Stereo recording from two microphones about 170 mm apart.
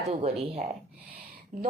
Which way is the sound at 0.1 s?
35° right (ahead or behind).